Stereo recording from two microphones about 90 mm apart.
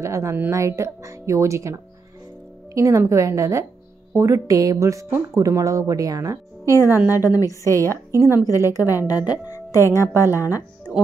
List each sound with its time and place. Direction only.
0.0 s a woman's voice: 35° right (ahead or behind)
7.2 s a woman's voice: 40° left (ahead or behind)
7.9 s a woman's voice: 35° right (ahead or behind)
8.6 s speech: 40° left (ahead or behind)
9.7 s a woman's voice: 30° left (ahead or behind)